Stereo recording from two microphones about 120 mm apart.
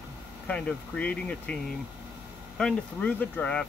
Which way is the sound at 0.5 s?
10° left (ahead or behind).